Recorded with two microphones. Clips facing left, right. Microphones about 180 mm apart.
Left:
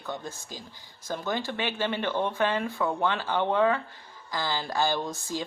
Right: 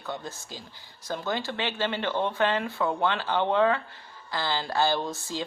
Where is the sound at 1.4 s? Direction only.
15° left (ahead or behind).